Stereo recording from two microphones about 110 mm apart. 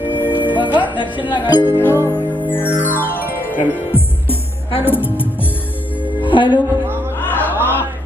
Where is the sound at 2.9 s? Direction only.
20° left (ahead or behind).